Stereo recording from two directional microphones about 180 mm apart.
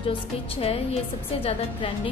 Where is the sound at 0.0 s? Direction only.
30° left (ahead or behind).